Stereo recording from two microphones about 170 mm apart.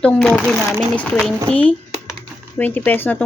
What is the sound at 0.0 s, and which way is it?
Speech, 5° left (ahead or behind).